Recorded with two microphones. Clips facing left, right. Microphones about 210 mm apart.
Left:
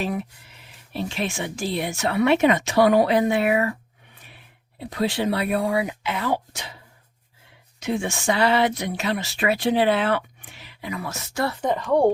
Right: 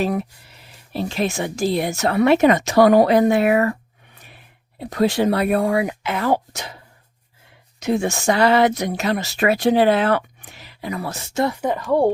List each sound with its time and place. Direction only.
0.0 s speech: 40° right (ahead or behind)
4.8 s speech: 45° right (ahead or behind)
7.8 s speech: 40° right (ahead or behind); by 11.5 s 25° right (ahead or behind)
11.6 s a woman's voice: 5° right (ahead or behind)